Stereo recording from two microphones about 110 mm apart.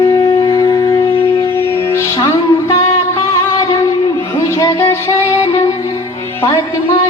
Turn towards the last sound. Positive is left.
turn(degrees=30)  # may be behind; listen again after turning